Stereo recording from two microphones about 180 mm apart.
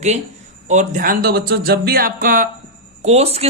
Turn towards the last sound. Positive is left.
turn(degrees=-35)  # may be behind; listen again after turning